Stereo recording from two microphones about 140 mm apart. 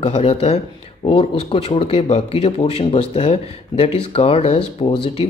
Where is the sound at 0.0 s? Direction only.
45° left (ahead or behind).